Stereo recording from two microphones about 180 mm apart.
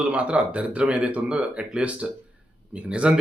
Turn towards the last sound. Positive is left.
turn(degrees=-5)  # may be behind; listen again after turning